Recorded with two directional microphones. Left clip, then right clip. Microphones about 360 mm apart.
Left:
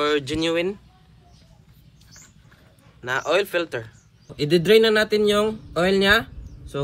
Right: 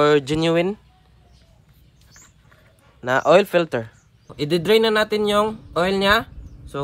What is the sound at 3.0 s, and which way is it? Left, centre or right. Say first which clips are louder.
Speech: right 6 dB; centre.